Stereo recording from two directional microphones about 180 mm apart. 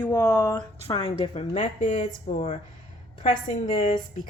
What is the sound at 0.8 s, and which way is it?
Chopping, 25° left (ahead or behind).